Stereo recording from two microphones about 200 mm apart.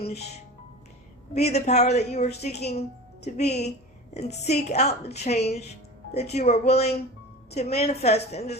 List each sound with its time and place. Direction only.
1.3 s a woman's voice: 35° left (ahead or behind)